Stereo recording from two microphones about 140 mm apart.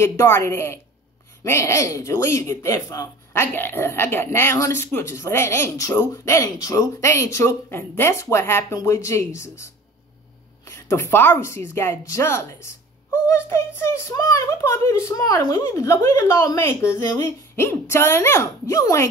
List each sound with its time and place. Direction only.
0.0 s a woman's voice: 20° left (ahead or behind)